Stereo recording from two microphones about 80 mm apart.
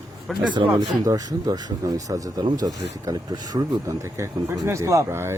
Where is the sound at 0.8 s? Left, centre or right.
Right.